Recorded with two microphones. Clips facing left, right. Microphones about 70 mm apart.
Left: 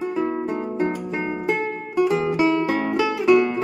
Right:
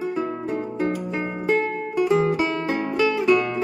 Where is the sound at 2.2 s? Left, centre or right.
Centre.